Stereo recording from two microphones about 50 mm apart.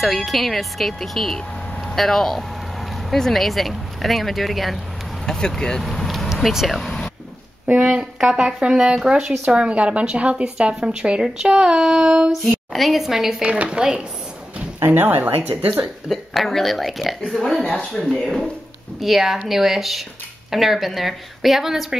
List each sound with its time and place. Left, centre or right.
0.0 s speech: centre
5.2 s speech: centre
7.6 s speech: right
7.9 s speech: centre
12.1 s speech: right
12.7 s speech: centre
13.4 s speech: right
15.0 s speech: right
16.1 s speech: centre